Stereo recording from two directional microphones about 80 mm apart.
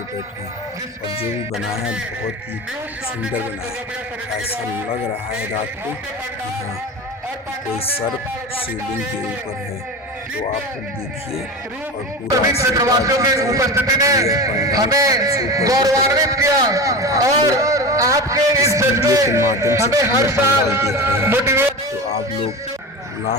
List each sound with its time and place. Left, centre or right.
12.5 s a man's voice: right